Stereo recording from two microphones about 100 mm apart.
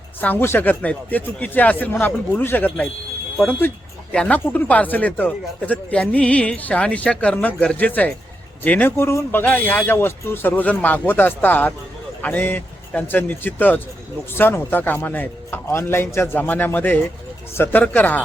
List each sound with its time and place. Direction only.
0.2 s speech: 20° left (ahead or behind)
4.1 s speech: 10° left (ahead or behind)